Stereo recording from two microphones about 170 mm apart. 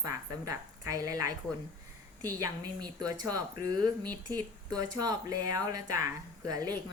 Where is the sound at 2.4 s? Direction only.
25° right (ahead or behind).